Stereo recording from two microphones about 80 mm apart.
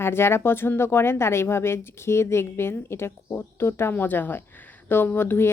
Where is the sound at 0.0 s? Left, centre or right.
Left.